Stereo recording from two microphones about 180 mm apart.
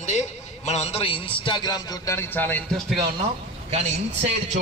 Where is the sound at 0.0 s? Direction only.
40° left (ahead or behind); by 2.6 s 10° left (ahead or behind).